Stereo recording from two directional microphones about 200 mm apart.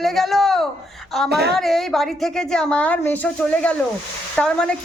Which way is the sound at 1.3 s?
55° right (ahead or behind).